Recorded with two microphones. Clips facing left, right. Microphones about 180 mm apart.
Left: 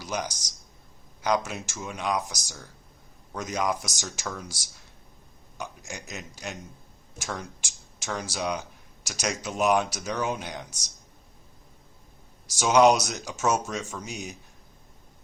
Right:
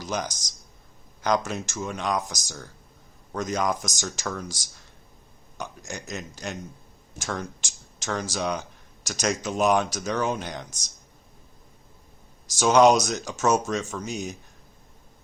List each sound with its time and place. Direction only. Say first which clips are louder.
0.0 s speech: right 2 dB; 10° left (ahead or behind)
5.9 s speech: right 4 dB; 10° left (ahead or behind)
12.5 s speech: right 2 dB; 10° left (ahead or behind)